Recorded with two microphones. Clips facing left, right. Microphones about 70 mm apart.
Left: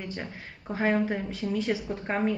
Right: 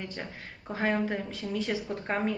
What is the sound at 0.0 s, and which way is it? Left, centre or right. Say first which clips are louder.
A woman's voice: left 2 dB; centre.